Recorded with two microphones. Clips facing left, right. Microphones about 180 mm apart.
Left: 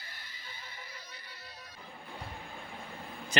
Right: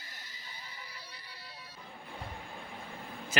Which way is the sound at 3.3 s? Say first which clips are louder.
Left 2 dB; 5° right (ahead or behind).